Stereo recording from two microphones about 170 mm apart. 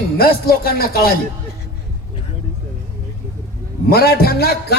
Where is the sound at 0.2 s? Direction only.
65° left (ahead or behind).